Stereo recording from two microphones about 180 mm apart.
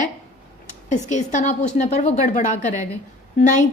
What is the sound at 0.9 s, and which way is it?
A woman's voice, 40° left (ahead or behind).